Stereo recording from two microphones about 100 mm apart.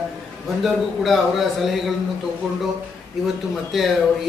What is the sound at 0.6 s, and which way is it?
A man's voice, centre (ahead or behind).